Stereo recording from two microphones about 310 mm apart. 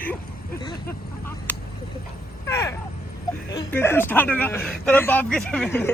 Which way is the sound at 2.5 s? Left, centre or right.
Centre.